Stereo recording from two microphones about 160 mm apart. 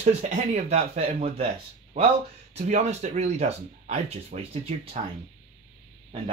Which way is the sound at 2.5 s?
40° right (ahead or behind).